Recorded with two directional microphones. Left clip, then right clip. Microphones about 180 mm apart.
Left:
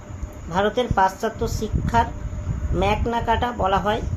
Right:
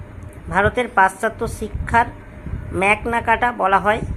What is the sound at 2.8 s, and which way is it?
Speech, 20° right (ahead or behind).